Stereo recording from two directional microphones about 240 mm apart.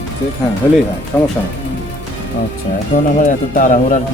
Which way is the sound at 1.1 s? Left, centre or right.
Centre.